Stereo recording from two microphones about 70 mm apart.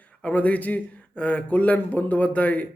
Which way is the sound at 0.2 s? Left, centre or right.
Centre.